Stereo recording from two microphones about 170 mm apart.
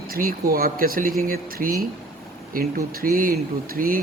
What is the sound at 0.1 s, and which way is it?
Speech, 60° right (ahead or behind).